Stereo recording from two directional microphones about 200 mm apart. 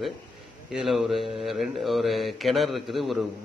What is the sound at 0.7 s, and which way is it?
Speech, centre (ahead or behind).